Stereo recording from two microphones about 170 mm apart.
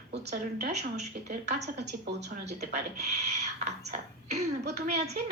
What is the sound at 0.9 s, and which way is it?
A woman's voice, 40° right (ahead or behind).